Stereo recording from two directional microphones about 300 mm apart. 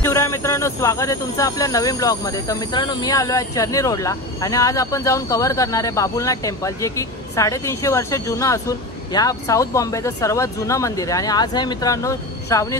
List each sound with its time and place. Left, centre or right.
0.0 s speech: centre